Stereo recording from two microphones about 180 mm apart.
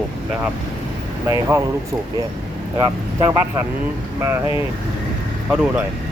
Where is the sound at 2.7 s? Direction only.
20° right (ahead or behind); by 5.8 s 5° right (ahead or behind).